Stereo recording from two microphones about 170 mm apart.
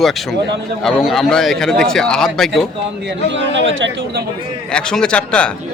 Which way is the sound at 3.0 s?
90° right.